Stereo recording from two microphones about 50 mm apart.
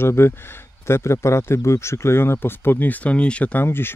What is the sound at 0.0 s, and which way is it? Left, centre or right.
Speech, left.